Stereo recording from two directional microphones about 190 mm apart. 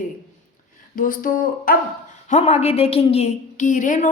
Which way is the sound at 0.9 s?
45° left (ahead or behind).